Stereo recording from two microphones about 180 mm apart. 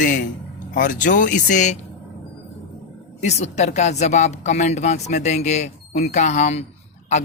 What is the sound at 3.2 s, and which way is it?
Speech, 40° left (ahead or behind).